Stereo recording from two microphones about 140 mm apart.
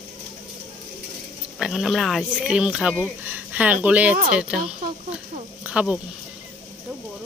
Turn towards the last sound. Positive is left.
turn(degrees=-5)  # may be behind; listen again after turning